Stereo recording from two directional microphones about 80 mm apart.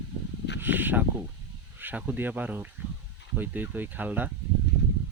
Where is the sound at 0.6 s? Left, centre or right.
Right.